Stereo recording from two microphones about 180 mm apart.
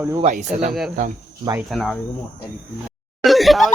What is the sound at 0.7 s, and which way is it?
Speech, centre (ahead or behind).